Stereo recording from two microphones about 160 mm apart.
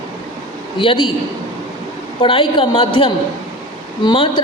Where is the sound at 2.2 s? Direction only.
35° left (ahead or behind).